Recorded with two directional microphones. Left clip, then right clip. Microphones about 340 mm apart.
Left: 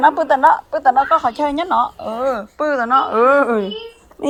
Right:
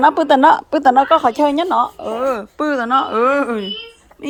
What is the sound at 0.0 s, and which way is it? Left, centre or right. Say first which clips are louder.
A woman's voice: right 1 dB; centre.